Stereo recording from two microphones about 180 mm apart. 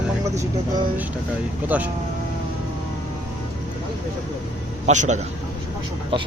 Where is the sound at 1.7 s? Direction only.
10° right (ahead or behind).